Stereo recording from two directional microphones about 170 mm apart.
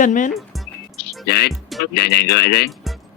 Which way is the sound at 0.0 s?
50° left (ahead or behind).